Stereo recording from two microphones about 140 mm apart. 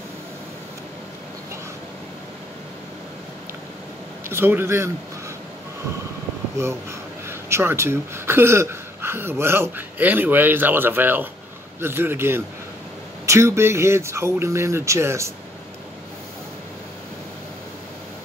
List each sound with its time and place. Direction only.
4.3 s speech: 15° right (ahead or behind)
6.6 s speech: 20° right (ahead or behind)